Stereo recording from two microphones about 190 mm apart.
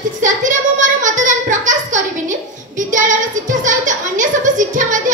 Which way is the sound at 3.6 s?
40° right (ahead or behind).